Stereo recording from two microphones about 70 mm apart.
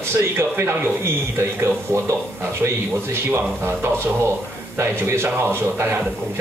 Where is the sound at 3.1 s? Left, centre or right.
Right.